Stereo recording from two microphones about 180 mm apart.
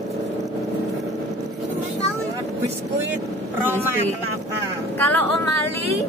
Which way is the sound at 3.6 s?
10° right (ahead or behind).